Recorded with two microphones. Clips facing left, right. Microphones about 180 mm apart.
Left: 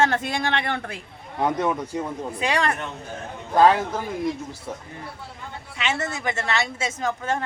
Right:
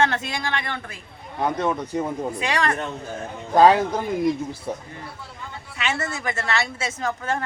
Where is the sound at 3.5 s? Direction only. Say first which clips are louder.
Right 2 dB; 15° right (ahead or behind).